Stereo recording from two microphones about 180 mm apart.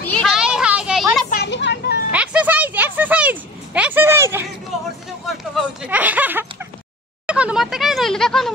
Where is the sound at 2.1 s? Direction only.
5° right (ahead or behind).